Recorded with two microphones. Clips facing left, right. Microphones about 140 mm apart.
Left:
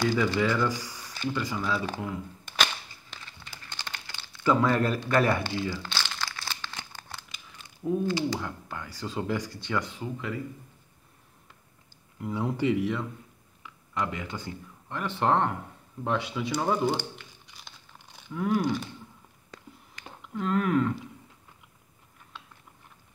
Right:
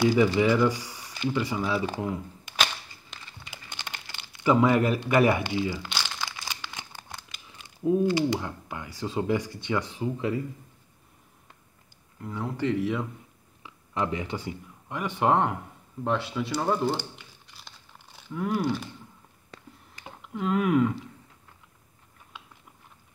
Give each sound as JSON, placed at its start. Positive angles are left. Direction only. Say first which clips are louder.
{"t": 0.0, "sound": "speech", "louder": "right 4 dB", "side_deg": -15}
{"t": 1.1, "sound": "a sound", "louder": "right 3 dB", "side_deg": -5}
{"t": 1.6, "sound": "speech", "louder": "right 2 dB", "side_deg": -10}
{"t": 3.6, "sound": "crumpling", "louder": "even", "side_deg": -20}
{"t": 7.8, "sound": "speech", "louder": "right 4 dB", "side_deg": -15}
{"t": 12.2, "sound": "speech", "louder": "left 2 dB", "side_deg": 15}
{"t": 13.6, "sound": "a sound", "louder": "right 2 dB", "side_deg": -25}
{"t": 14.9, "sound": "speech", "louder": "right 2 dB", "side_deg": -10}
{"t": 16.0, "sound": "crumpling", "louder": "right 1 dB", "side_deg": 0}
{"t": 20.2, "sound": "speech", "louder": "right 1 dB", "side_deg": -5}